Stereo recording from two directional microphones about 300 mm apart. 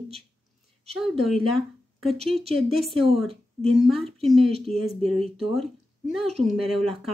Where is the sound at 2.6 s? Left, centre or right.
Centre.